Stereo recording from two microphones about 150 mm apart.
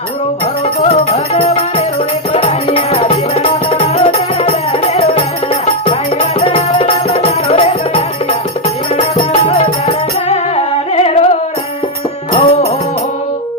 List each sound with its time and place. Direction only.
0.9 s music: 40° left (ahead or behind)
12.3 s music: 40° left (ahead or behind)